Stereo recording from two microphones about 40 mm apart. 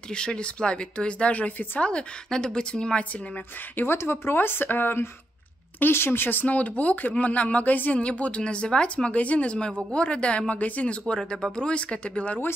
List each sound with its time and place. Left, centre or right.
0.1 s speech: left
3.7 s a woman's voice: left
6.5 s speech: left
8.0 s speech: left